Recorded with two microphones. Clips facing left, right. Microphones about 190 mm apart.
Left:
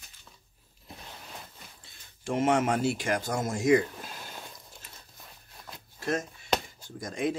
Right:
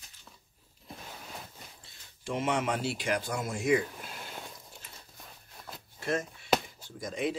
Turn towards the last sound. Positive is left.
turn(degrees=45)  # may be behind; listen again after turning